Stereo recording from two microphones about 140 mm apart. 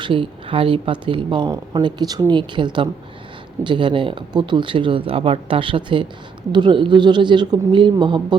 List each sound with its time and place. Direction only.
0.0 s speech: 35° right (ahead or behind)